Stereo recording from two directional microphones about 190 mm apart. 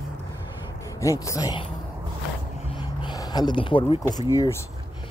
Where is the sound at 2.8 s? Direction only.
20° left (ahead or behind).